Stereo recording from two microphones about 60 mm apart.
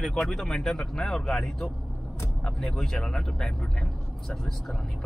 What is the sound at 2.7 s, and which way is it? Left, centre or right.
A man's voice, centre.